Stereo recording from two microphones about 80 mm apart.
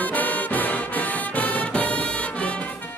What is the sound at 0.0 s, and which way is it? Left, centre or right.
Music, left.